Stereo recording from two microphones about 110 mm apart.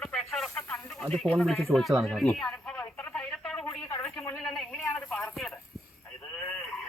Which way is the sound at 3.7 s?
30° left (ahead or behind).